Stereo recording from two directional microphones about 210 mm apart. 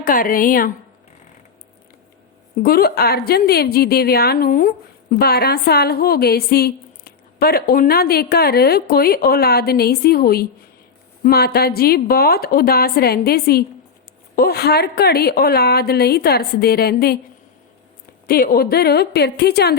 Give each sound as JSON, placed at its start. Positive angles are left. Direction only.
{"t": 0.0, "sound": "a woman's voice", "side_deg": 40}
{"t": 2.6, "sound": "a woman's voice", "side_deg": 45}
{"t": 18.3, "sound": "a woman's voice", "side_deg": 45}